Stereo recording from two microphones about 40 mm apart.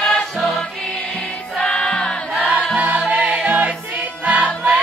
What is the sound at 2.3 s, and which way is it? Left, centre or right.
Music, right.